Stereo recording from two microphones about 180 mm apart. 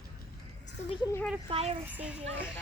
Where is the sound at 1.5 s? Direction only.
35° right (ahead or behind).